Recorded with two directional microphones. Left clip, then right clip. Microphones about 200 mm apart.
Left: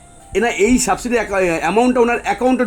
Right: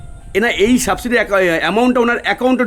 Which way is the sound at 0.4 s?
20° right (ahead or behind).